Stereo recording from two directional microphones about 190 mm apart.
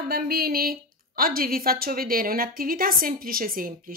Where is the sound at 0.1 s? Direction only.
55° right (ahead or behind).